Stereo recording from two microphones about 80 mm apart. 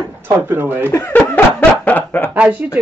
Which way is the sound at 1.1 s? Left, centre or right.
Centre.